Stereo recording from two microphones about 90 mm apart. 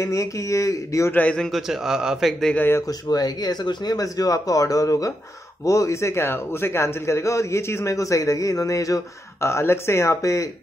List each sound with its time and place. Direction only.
0.0 s a man's voice: 35° left (ahead or behind)
1.1 s a man's voice: 15° left (ahead or behind)
1.7 s speech: 5° right (ahead or behind)
2.9 s a man's voice: 50° left (ahead or behind)